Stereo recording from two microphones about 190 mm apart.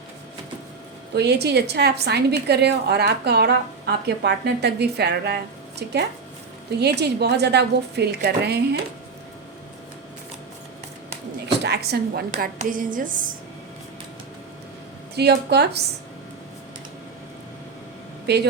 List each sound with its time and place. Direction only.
1.1 s a woman's voice: 60° right (ahead or behind)
11.4 s a sound: 60° right (ahead or behind)
12.5 s speech: 45° right (ahead or behind)
15.1 s a woman's voice: 60° right (ahead or behind)
18.3 s a woman's voice: 60° right (ahead or behind)